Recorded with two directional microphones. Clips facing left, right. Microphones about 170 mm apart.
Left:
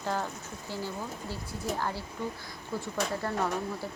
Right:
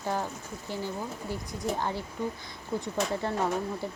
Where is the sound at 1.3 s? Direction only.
20° right (ahead or behind).